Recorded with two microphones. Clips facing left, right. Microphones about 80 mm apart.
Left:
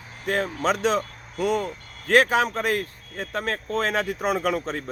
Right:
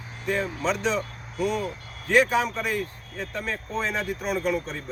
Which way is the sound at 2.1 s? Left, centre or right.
Left.